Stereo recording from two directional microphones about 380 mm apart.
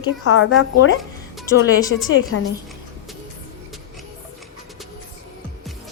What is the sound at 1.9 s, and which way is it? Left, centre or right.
Speech, left.